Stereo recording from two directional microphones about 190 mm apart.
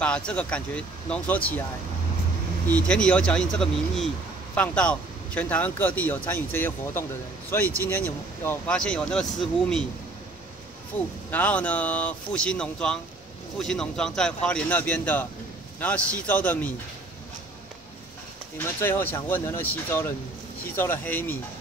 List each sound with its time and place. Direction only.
0.0 s speech: 5° left (ahead or behind)
2.7 s speech: 5° left (ahead or behind)
10.9 s speech: 10° left (ahead or behind)
18.6 s speech: 10° left (ahead or behind)